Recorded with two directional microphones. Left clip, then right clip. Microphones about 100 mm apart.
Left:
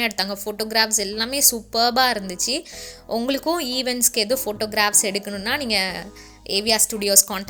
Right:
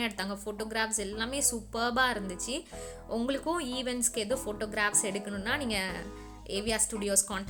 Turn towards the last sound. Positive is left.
turn(degrees=40)  # may be behind; listen again after turning